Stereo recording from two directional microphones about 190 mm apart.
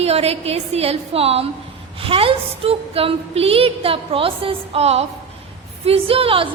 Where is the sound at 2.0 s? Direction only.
30° right (ahead or behind).